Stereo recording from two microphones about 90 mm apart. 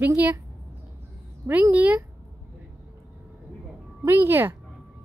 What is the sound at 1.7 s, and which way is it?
Speech, 15° right (ahead or behind).